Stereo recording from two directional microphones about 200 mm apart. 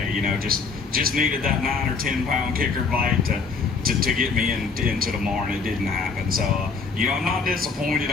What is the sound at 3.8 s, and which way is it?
Speech, 45° right (ahead or behind).